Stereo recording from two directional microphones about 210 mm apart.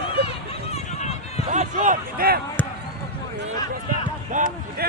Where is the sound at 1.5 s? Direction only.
35° right (ahead or behind).